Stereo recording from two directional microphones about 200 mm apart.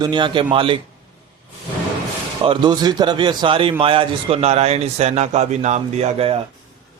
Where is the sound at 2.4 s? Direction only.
20° right (ahead or behind).